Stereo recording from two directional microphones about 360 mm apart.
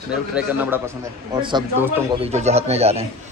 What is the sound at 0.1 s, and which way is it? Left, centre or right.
A man's voice, centre.